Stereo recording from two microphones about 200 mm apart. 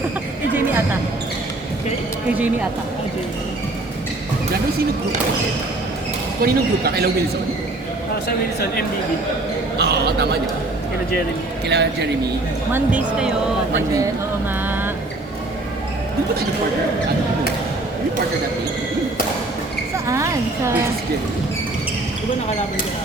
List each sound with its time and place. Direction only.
6.4 s speech: 50° right (ahead or behind)
9.7 s a man's voice: 55° right (ahead or behind)
11.7 s a man's voice: 55° right (ahead or behind)
12.7 s speech: 5° right (ahead or behind)
20.1 s a sound: 15° right (ahead or behind)